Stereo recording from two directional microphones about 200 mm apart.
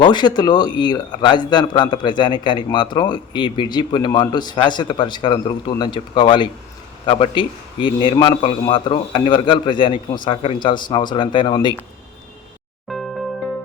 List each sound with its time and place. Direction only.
0.0 s a man's voice: 20° left (ahead or behind)
12.9 s music: centre (ahead or behind)